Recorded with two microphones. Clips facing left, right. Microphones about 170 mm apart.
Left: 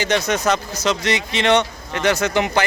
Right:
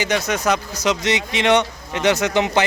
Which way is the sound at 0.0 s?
10° right (ahead or behind).